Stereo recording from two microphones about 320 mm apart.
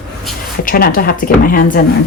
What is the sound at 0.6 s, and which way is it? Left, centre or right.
Speech, left.